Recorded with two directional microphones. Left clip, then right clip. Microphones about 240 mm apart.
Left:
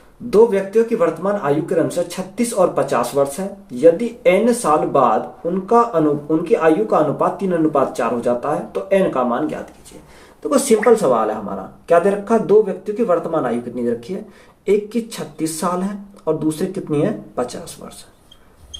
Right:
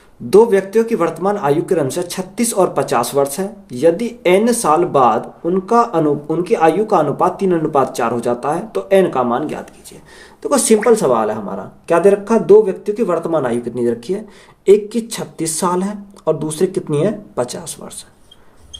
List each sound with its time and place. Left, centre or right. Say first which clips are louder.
0.3 s speech: right 3 dB; right